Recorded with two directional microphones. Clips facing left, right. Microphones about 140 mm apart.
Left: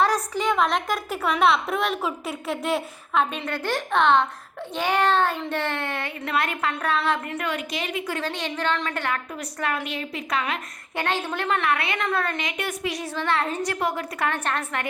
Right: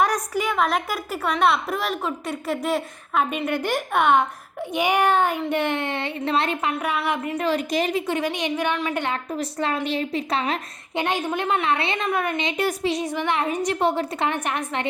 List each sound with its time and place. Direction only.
0.0 s a woman's voice: 10° right (ahead or behind)
7.3 s a woman's voice: 35° right (ahead or behind)
8.0 s a child's voice: 15° right (ahead or behind)
10.9 s a child's voice: 15° right (ahead or behind)
12.0 s a child's voice: 15° right (ahead or behind)
12.5 s a woman's voice: 30° right (ahead or behind)
12.9 s a woman's voice: 20° right (ahead or behind)
14.3 s a child's voice: 15° right (ahead or behind)